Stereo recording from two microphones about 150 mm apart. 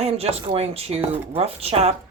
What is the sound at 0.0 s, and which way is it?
Speech, 45° right (ahead or behind).